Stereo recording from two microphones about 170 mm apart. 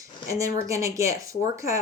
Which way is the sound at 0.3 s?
20° right (ahead or behind).